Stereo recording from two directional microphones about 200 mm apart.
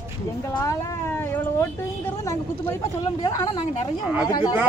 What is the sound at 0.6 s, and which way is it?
A woman's voice, 15° left (ahead or behind).